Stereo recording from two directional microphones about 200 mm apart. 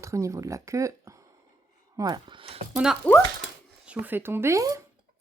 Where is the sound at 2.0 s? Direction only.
20° right (ahead or behind).